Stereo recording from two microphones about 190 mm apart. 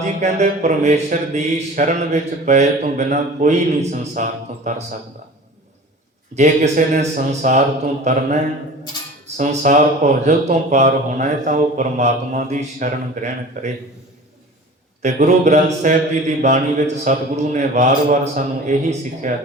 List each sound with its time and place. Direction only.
0.0 s speech: 40° right (ahead or behind)
6.3 s speech: 40° right (ahead or behind)
15.0 s speech: 40° right (ahead or behind)